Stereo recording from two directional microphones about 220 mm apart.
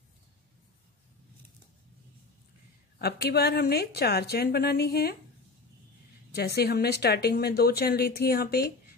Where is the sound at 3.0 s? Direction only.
45° left (ahead or behind).